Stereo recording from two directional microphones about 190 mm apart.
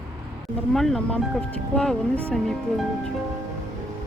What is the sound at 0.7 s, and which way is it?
Speech, centre (ahead or behind).